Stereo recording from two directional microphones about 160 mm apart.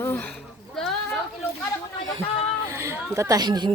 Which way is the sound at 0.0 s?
10° left (ahead or behind).